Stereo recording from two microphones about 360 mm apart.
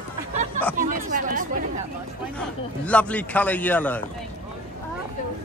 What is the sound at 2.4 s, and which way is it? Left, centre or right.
A man's voice, centre.